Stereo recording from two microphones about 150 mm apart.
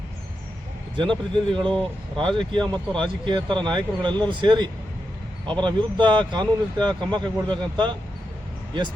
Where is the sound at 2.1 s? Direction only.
35° right (ahead or behind).